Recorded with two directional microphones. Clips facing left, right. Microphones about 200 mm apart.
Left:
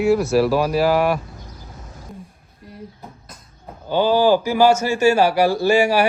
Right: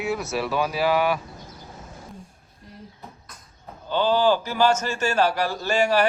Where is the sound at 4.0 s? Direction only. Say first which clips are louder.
Left 5 dB; 10° left (ahead or behind).